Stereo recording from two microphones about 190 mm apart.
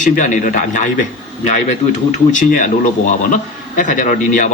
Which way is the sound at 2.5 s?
45° left (ahead or behind).